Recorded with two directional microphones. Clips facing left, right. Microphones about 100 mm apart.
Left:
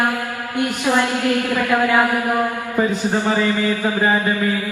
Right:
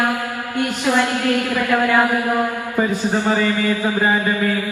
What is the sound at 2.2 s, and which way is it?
Mantra, 15° left (ahead or behind).